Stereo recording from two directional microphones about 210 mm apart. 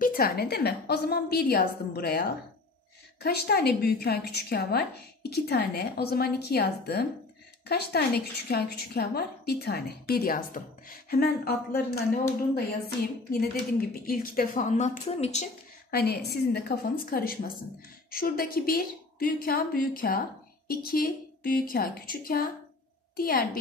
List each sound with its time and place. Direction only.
0.0 s a woman's voice: 45° left (ahead or behind)
15.9 s a woman's voice: 50° left (ahead or behind)